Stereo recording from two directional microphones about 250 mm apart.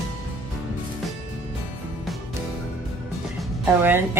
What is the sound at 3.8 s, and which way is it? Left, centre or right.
Speech, centre.